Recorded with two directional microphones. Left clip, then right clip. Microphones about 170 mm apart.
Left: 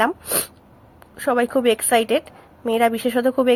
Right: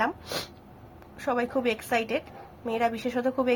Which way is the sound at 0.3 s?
30° left (ahead or behind).